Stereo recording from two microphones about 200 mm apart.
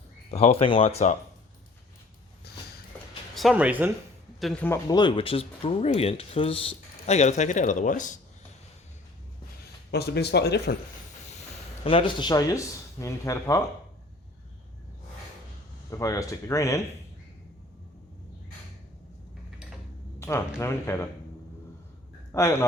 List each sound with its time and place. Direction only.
0.3 s speech: 30° left (ahead or behind)
3.3 s speech: 5° right (ahead or behind)
4.4 s speech: 5° left (ahead or behind)
4.9 s speech: 20° left (ahead or behind); by 8.2 s 40° left (ahead or behind)
9.9 s speech: 55° left (ahead or behind)
11.9 s speech: 25° left (ahead or behind)
15.9 s speech: 15° left (ahead or behind)
20.1 s speech: 15° left (ahead or behind)
22.3 s a man's voice: 15° left (ahead or behind)